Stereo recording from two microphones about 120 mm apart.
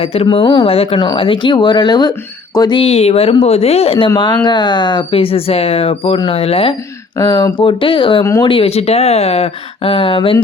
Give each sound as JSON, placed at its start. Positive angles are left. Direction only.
{"t": 0.0, "sound": "speech", "side_deg": 55}
{"t": 0.4, "sound": "speech", "side_deg": 40}
{"t": 0.7, "sound": "speech", "side_deg": 55}
{"t": 0.9, "sound": "speech", "side_deg": 45}
{"t": 2.8, "sound": "speech", "side_deg": 60}
{"t": 4.4, "sound": "speech", "side_deg": 40}
{"t": 7.2, "sound": "speech", "side_deg": 35}
{"t": 7.6, "sound": "speech", "side_deg": 45}
{"t": 8.2, "sound": "speech", "side_deg": 30}
{"t": 8.4, "sound": "speech", "side_deg": 50}